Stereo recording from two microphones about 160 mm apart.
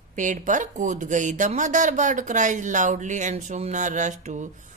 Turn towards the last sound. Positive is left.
turn(degrees=-50)  # may be behind; listen again after turning